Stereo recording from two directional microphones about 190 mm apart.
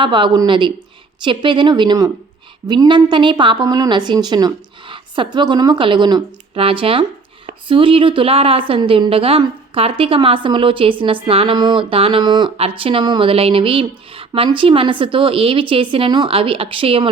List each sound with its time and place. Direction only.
0.0 s a woman's voice: 25° right (ahead or behind)